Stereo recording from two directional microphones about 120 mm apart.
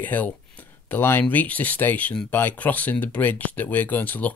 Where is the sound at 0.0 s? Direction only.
15° left (ahead or behind).